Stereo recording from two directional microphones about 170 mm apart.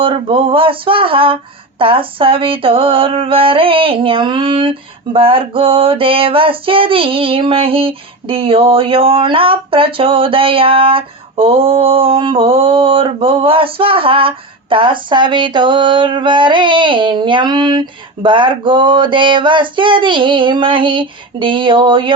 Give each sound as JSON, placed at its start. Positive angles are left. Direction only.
{"t": 0.0, "sound": "female singing", "side_deg": -30}